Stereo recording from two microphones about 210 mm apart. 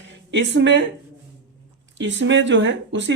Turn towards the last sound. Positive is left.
turn(degrees=-60)  # may be behind; listen again after turning